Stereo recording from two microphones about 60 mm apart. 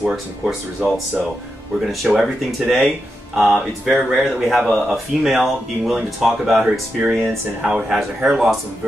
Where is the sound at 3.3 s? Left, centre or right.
Right.